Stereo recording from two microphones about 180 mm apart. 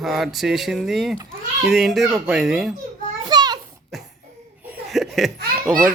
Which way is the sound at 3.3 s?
25° right (ahead or behind).